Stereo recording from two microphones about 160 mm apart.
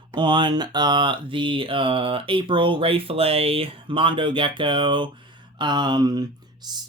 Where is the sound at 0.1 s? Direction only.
30° right (ahead or behind).